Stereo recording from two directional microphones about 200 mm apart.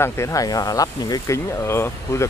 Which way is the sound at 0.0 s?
15° left (ahead or behind).